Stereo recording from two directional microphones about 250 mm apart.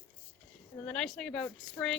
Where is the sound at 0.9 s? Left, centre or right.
Centre.